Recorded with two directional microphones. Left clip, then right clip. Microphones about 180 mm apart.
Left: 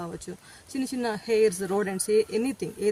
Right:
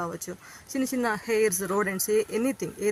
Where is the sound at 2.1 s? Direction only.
45° right (ahead or behind).